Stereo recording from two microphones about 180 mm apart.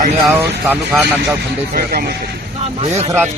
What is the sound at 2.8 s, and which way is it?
Speech, 35° right (ahead or behind).